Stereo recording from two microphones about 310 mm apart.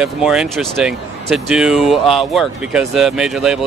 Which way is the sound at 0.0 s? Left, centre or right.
Centre.